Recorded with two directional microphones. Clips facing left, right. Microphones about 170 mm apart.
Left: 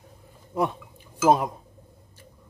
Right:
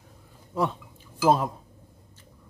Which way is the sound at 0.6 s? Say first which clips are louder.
Left 1 dB; 15° left (ahead or behind).